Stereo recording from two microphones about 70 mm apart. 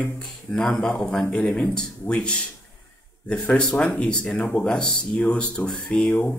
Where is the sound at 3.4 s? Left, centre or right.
Centre.